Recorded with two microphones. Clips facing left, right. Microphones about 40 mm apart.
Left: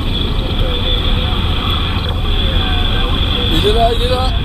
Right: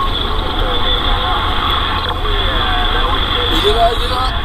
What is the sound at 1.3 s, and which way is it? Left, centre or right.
Vehicle, centre.